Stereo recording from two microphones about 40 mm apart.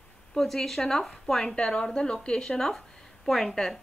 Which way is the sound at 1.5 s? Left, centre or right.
Left.